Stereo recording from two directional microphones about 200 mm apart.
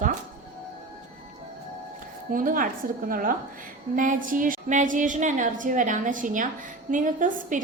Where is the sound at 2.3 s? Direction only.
45° right (ahead or behind).